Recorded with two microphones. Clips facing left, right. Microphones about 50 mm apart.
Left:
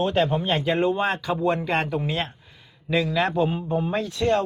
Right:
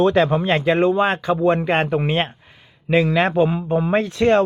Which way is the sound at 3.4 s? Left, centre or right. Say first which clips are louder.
Right 5 dB; right.